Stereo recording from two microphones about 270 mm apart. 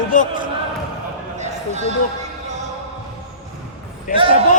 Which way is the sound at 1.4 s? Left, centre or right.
Right.